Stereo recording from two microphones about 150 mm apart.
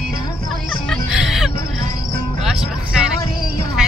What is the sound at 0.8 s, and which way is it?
Music, 5° right (ahead or behind).